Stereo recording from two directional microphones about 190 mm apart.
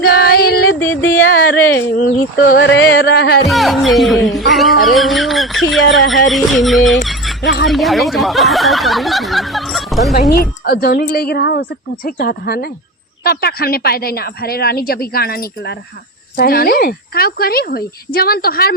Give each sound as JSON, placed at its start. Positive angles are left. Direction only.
{"t": 0.0, "sound": "female singing", "side_deg": 55}
{"t": 0.8, "sound": "music", "side_deg": 10}
{"t": 1.5, "sound": "speech", "side_deg": 55}
{"t": 2.6, "sound": "a woman's voice", "side_deg": 70}
{"t": 3.4, "sound": "speech", "side_deg": 0}
{"t": 6.9, "sound": "a sound", "side_deg": 0}
{"t": 7.4, "sound": "speech", "side_deg": 65}
{"t": 7.7, "sound": "speech", "side_deg": 0}
{"t": 10.3, "sound": "a woman's voice", "side_deg": 55}